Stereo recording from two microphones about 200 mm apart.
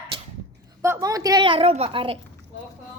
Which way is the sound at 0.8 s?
15° right (ahead or behind).